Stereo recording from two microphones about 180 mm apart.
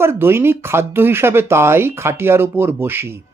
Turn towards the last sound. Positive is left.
turn(degrees=-10)  # may be behind; listen again after turning